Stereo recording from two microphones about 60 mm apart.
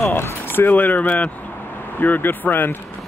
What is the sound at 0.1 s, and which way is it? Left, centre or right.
Speech, left.